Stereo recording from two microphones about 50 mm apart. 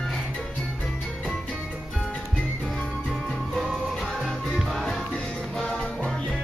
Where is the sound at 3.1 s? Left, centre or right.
Centre.